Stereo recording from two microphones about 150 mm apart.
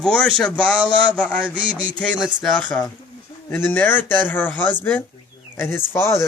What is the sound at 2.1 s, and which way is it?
Speech, 5° right (ahead or behind).